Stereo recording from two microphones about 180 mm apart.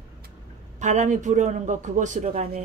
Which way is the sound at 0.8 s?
40° right (ahead or behind).